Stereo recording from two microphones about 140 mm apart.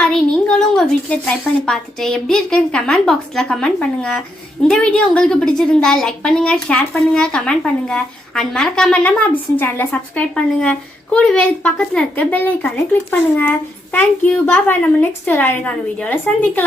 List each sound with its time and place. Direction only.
0.0 s a woman's voice: 5° left (ahead or behind)